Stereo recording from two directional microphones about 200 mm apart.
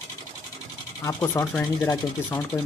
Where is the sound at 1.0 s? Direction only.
15° left (ahead or behind).